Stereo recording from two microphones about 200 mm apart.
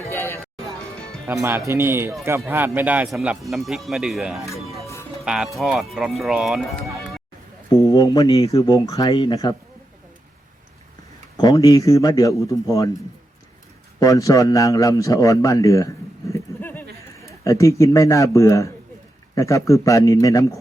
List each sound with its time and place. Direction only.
0.1 s music: 10° left (ahead or behind)
1.3 s speech: 10° right (ahead or behind)
7.9 s speech: 20° left (ahead or behind)
11.3 s a man's voice: 20° left (ahead or behind)
14.0 s a man's voice: 15° left (ahead or behind)
16.3 s a sound: 10° left (ahead or behind)
17.4 s a man's voice: 15° left (ahead or behind)